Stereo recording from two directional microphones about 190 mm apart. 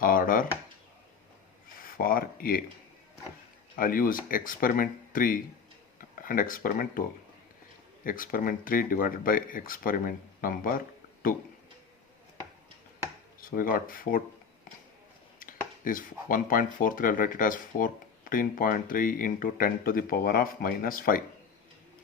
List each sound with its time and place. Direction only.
0.0 s speech: 45° left (ahead or behind)
1.8 s speech: 50° left (ahead or behind)
3.8 s speech: 45° left (ahead or behind)
8.0 s speech: 45° left (ahead or behind)
13.4 s speech: 45° left (ahead or behind)
15.4 s speech: 45° left (ahead or behind)